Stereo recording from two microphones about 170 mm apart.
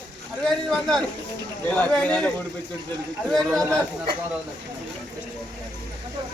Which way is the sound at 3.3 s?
5° left (ahead or behind).